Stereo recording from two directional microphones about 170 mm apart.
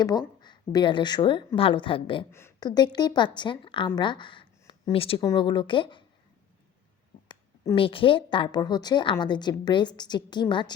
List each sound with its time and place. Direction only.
0.0 s a woman's voice: 25° left (ahead or behind)
2.3 s a woman's voice: 20° left (ahead or behind)
7.3 s a sound: 20° left (ahead or behind)
7.8 s a woman's voice: 30° left (ahead or behind)